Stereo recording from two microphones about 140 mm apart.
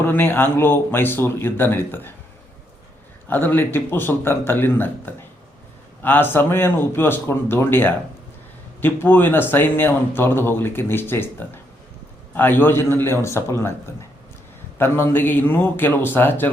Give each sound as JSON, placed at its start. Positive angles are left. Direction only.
{"t": 0.0, "sound": "speech", "side_deg": 15}
{"t": 3.2, "sound": "speech", "side_deg": 15}
{"t": 14.8, "sound": "speech", "side_deg": 15}